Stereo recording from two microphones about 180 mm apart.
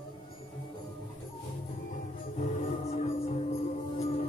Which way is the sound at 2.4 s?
40° left (ahead or behind).